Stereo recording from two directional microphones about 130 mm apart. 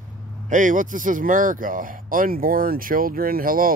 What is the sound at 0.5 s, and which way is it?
Speech, 80° right.